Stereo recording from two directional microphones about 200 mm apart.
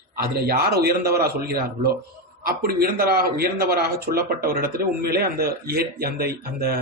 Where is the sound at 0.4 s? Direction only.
50° right (ahead or behind).